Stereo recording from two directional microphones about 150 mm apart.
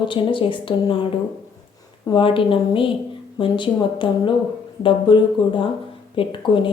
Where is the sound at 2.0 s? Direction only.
35° left (ahead or behind).